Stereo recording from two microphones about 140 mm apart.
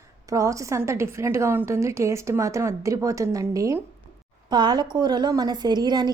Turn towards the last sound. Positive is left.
turn(degrees=-30)  # may be behind; listen again after turning